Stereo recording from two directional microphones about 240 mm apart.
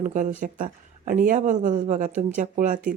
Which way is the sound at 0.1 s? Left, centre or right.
Right.